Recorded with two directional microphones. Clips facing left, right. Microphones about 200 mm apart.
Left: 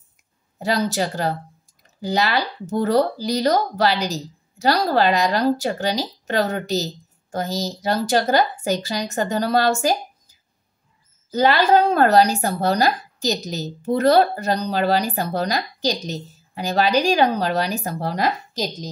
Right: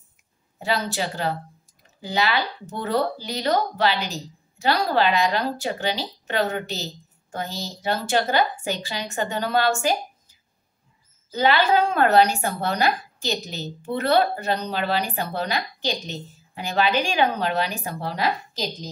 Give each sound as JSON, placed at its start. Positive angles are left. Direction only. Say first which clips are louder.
{"t": 0.6, "sound": "speech", "louder": "left 4 dB", "side_deg": 40}
{"t": 11.3, "sound": "speech", "louder": "left 3 dB", "side_deg": 40}